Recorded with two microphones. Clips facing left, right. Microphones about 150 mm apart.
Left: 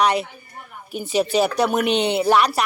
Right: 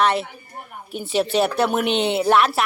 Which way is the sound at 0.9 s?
Centre (ahead or behind).